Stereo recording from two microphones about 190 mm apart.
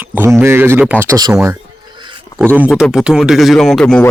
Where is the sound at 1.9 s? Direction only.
25° right (ahead or behind).